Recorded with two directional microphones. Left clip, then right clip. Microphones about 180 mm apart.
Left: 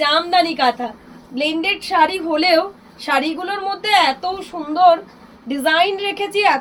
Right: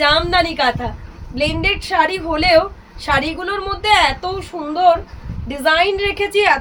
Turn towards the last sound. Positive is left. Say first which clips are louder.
# right 2 dB
turn(degrees=-20)  # may be behind; listen again after turning